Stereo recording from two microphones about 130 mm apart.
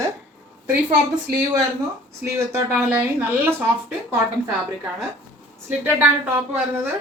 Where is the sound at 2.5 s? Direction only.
20° right (ahead or behind).